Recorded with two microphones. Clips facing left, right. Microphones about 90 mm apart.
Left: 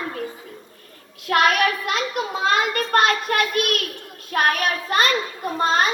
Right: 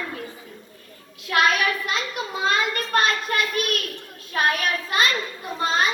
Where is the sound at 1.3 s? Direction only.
50° left (ahead or behind).